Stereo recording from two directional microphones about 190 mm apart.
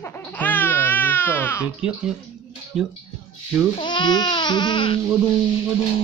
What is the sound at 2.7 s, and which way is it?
Speech, 5° right (ahead or behind).